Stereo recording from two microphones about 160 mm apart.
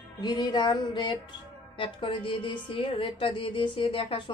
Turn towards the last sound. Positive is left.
turn(degrees=35)  # may be behind; listen again after turning